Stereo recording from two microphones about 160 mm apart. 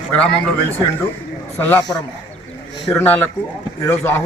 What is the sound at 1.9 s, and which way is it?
Speech, 25° left (ahead or behind).